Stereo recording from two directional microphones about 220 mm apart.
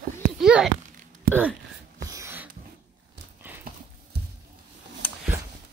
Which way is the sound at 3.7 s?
40° right (ahead or behind).